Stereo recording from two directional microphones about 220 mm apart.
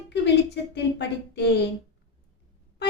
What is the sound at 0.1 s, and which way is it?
Speech, 50° left (ahead or behind).